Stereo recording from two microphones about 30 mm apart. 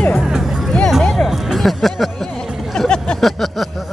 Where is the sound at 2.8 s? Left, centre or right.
Left.